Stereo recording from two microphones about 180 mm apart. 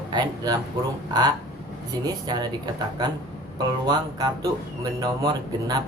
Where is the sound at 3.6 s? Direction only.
25° right (ahead or behind).